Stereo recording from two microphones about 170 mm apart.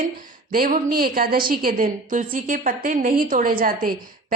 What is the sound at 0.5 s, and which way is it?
A woman's voice, 55° right (ahead or behind).